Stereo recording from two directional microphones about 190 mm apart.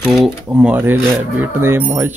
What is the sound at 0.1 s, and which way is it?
Rub, 5° right (ahead or behind).